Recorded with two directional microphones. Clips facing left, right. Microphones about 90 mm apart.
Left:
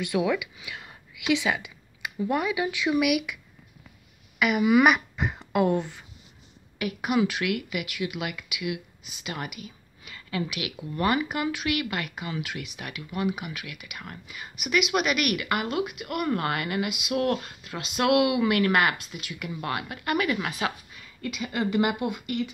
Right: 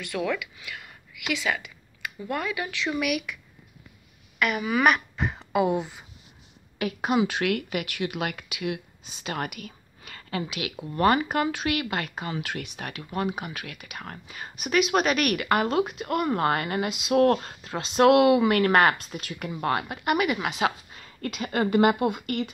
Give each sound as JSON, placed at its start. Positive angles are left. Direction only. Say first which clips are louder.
{"t": 0.0, "sound": "speech", "louder": "left 3 dB", "side_deg": 15}
{"t": 4.4, "sound": "speech", "louder": "left 4 dB", "side_deg": 5}
{"t": 6.8, "sound": "speech", "louder": "right 1 dB", "side_deg": -30}
{"t": 7.9, "sound": "speech", "louder": "right 2 dB", "side_deg": -45}
{"t": 9.3, "sound": "speech", "louder": "right 3 dB", "side_deg": -55}
{"t": 10.0, "sound": "a sound", "louder": "even", "side_deg": -45}
{"t": 10.5, "sound": "speech", "louder": "right 1 dB", "side_deg": -30}
{"t": 11.0, "sound": "speech", "louder": "right 4 dB", "side_deg": -40}
{"t": 11.4, "sound": "speech", "louder": "right 1 dB", "side_deg": -30}
{"t": 20.9, "sound": "speech", "louder": "right 1 dB", "side_deg": -40}